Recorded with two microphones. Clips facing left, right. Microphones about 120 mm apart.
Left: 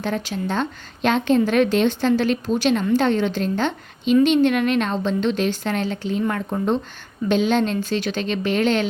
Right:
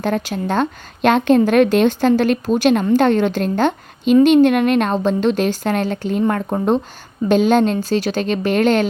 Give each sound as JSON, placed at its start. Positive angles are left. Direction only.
{"t": 0.0, "sound": "a woman's voice", "side_deg": -50}